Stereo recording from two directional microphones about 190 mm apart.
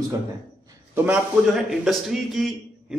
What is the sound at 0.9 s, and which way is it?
A man's voice, 5° right (ahead or behind).